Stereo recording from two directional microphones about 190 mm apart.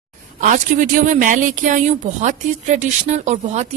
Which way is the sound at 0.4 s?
45° right (ahead or behind).